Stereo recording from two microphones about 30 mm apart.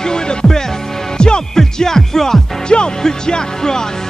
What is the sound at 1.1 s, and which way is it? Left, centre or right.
Music, left.